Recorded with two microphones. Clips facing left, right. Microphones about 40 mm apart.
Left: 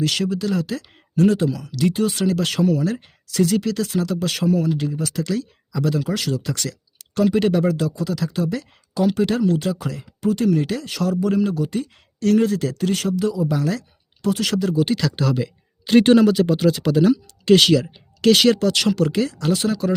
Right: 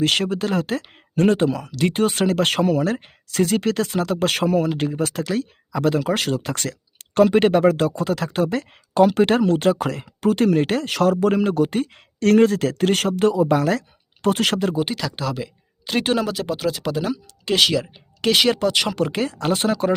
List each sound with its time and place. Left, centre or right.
0.0 s speech: right
14.8 s speech: centre; by 20.0 s right